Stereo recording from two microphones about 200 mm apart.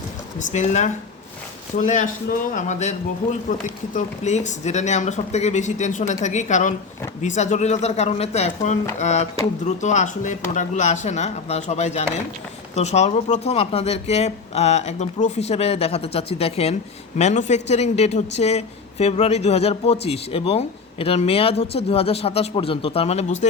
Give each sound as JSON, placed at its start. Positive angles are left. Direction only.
{"t": 0.3, "sound": "speech", "side_deg": 35}